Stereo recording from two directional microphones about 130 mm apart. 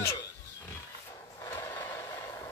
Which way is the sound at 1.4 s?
20° left (ahead or behind).